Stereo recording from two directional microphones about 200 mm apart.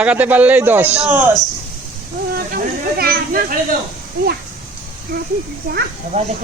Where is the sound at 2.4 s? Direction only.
50° right (ahead or behind).